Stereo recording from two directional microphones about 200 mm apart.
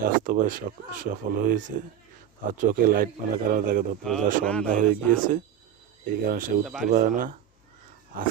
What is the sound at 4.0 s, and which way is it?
Speech, centre (ahead or behind).